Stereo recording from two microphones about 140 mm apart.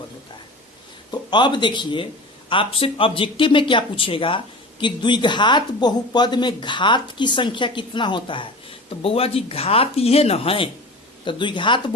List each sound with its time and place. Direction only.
1.1 s speech: 35° left (ahead or behind)